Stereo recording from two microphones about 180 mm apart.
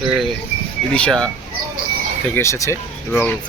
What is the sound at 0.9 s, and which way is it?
Speech, 5° left (ahead or behind).